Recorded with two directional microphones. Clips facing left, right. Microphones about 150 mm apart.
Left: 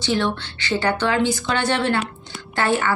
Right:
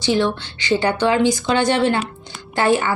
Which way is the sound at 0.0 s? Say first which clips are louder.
Right 3 dB; 15° right (ahead or behind).